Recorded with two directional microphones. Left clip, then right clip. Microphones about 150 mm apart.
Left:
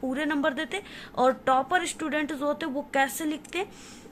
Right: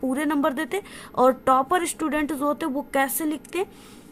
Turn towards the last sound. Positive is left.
turn(degrees=-40)  # may be behind; listen again after turning